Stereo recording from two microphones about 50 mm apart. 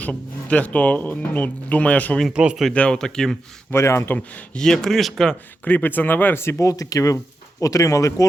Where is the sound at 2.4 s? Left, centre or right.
Right.